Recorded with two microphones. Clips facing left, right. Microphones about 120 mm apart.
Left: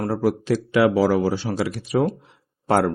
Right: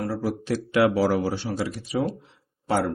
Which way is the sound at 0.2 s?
85° left.